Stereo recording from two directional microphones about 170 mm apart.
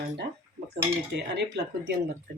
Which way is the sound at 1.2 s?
80° right.